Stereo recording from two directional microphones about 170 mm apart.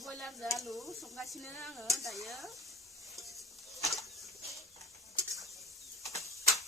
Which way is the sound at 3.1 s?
Centre (ahead or behind).